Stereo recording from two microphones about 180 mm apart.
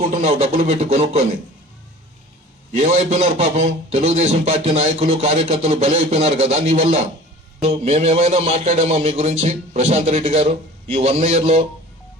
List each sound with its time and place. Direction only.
0.1 s a man's voice: 40° right (ahead or behind)
2.7 s a man's voice: 35° right (ahead or behind)